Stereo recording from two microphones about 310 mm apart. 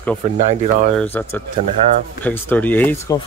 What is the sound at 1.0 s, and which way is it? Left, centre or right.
Speech, centre.